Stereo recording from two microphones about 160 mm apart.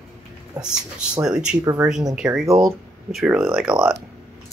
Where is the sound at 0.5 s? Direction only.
25° right (ahead or behind).